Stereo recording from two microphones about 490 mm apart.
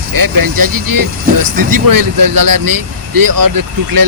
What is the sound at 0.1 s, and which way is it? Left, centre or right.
Speech, right.